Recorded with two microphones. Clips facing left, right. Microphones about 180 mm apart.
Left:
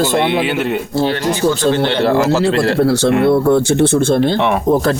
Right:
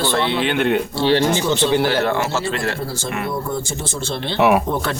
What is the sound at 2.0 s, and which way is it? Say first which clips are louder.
Speech: left 8 dB; 35° left (ahead or behind).